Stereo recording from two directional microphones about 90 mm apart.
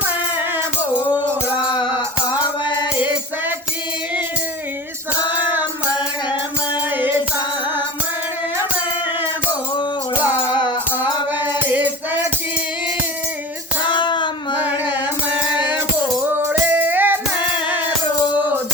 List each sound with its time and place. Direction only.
1.1 s music: 55° left (ahead or behind)
5.3 s music: 20° right (ahead or behind)
11.6 s music: 20° right (ahead or behind)
13.8 s a sound: 60° left (ahead or behind)
16.2 s music: 20° right (ahead or behind)